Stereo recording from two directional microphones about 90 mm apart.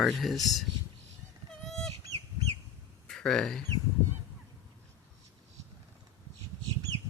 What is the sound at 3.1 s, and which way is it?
Speech, 5° left (ahead or behind).